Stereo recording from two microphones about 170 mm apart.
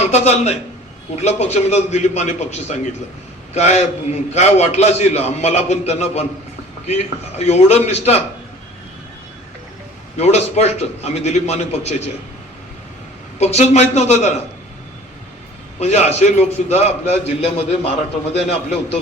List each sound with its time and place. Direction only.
0.0 s a man's voice: 40° left (ahead or behind)
10.2 s a man's voice: 40° left (ahead or behind)
13.4 s a man's voice: 40° left (ahead or behind)
15.8 s a man's voice: 40° left (ahead or behind)